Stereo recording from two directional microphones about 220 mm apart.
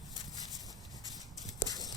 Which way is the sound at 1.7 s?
15° left (ahead or behind).